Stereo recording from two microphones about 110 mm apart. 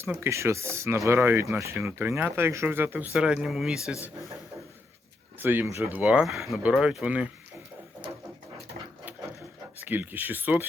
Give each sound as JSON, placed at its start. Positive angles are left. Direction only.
{"t": 0.2, "sound": "speech", "side_deg": -25}
{"t": 3.1, "sound": "speech", "side_deg": -10}
{"t": 5.4, "sound": "speech", "side_deg": -15}
{"t": 6.0, "sound": "speech", "side_deg": -10}
{"t": 9.7, "sound": "speech", "side_deg": -15}